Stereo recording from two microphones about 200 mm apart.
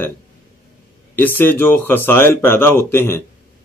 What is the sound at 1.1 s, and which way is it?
Speech, 10° left (ahead or behind).